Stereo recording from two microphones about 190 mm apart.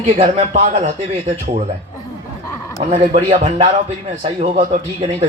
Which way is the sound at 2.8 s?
30° right (ahead or behind).